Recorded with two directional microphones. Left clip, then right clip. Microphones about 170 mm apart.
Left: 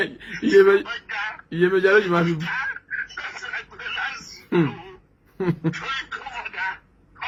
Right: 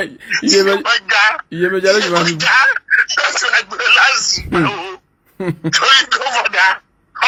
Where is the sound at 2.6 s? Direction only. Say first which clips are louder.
Right 16 dB; 90° right.